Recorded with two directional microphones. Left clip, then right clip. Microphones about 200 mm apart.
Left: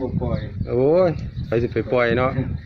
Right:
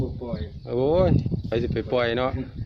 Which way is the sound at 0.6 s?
5° right (ahead or behind).